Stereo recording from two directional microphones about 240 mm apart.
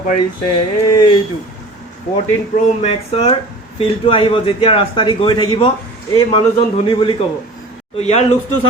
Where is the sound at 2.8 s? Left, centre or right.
Left.